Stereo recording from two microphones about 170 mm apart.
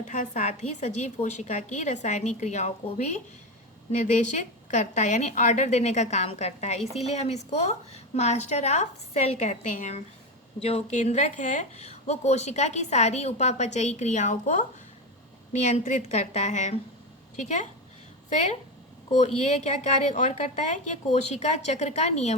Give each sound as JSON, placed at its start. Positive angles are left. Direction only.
{"t": 0.0, "sound": "a woman's voice", "side_deg": 45}
{"t": 15.6, "sound": "a woman's voice", "side_deg": 45}
{"t": 19.2, "sound": "speech", "side_deg": 40}